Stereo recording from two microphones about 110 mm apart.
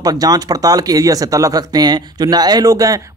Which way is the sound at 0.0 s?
35° right (ahead or behind).